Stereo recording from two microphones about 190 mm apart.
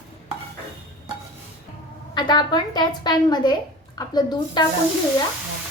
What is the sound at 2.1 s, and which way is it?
A woman's voice, 20° left (ahead or behind).